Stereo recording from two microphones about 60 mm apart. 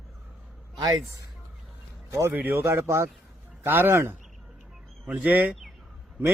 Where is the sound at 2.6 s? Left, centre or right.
Right.